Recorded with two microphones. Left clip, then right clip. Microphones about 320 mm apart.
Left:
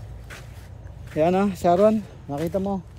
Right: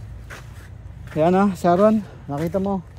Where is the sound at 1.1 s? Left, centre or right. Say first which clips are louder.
Right 3 dB; centre.